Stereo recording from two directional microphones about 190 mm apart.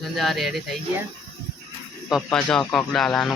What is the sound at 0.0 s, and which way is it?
Speech, centre (ahead or behind).